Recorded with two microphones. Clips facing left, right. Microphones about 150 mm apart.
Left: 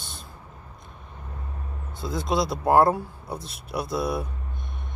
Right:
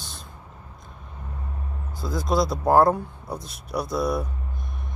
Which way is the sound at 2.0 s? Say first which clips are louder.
Right 2 dB; centre (ahead or behind).